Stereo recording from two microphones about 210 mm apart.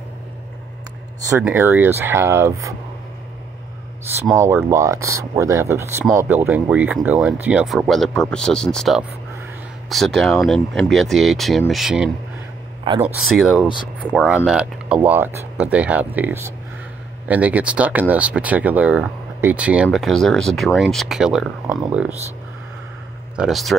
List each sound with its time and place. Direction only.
1.4 s speech: 10° right (ahead or behind)
4.3 s speech: 10° right (ahead or behind)
12.8 s speech: 25° right (ahead or behind)
13.2 s speech: centre (ahead or behind)
23.3 s speech: centre (ahead or behind)